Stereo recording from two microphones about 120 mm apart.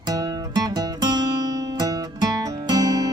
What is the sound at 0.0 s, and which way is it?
Music, 35° right (ahead or behind).